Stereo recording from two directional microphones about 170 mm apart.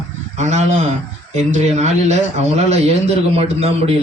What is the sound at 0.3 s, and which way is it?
A man's voice, 45° right (ahead or behind).